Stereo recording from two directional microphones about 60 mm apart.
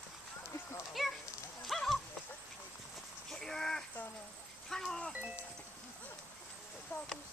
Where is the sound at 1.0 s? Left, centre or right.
Centre.